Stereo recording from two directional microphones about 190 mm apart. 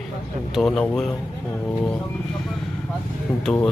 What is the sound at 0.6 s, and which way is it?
Speech, 5° left (ahead or behind).